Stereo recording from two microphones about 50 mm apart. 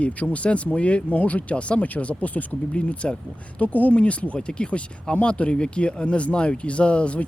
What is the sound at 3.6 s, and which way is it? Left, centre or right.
Speech, left.